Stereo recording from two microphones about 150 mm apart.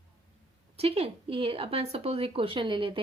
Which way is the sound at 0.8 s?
40° right (ahead or behind).